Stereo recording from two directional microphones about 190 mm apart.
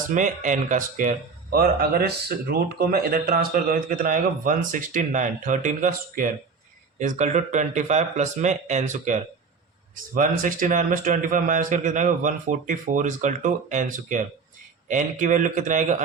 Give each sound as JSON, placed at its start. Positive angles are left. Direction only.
{"t": 0.1, "sound": "speech", "side_deg": -40}